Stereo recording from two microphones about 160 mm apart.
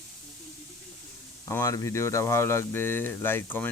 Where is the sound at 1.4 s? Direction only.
20° left (ahead or behind).